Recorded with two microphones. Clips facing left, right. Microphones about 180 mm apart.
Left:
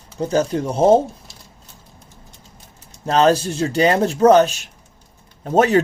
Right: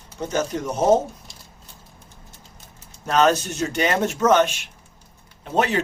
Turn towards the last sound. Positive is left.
turn(degrees=45)  # may be behind; listen again after turning